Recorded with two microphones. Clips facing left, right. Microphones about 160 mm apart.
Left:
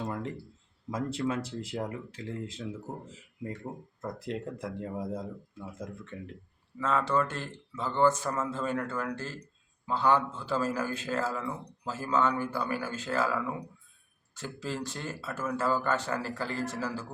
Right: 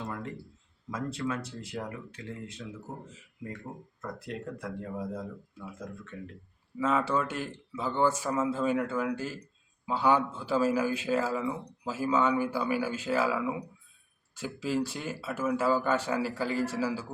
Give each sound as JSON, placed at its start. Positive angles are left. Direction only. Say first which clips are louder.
{"t": 0.9, "sound": "speech", "louder": "left 2 dB", "side_deg": 25}
{"t": 4.0, "sound": "speech", "louder": "left 2 dB", "side_deg": 25}
{"t": 6.7, "sound": "a man's voice", "louder": "even", "side_deg": -10}